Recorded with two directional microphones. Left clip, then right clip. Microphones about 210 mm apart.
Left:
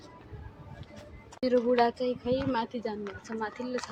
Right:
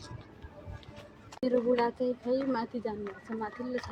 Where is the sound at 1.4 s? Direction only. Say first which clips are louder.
Left 3 dB; centre (ahead or behind).